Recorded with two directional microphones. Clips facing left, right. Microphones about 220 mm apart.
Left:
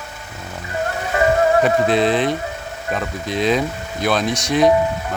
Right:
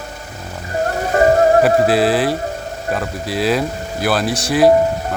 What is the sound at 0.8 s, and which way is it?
Music, 40° right (ahead or behind).